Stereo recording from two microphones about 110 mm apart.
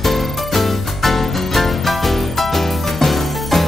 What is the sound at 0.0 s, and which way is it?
Music, centre (ahead or behind).